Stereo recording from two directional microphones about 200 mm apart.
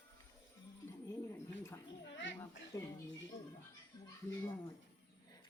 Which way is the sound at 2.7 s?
15° left (ahead or behind).